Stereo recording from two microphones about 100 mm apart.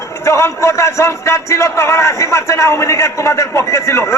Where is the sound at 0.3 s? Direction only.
30° left (ahead or behind).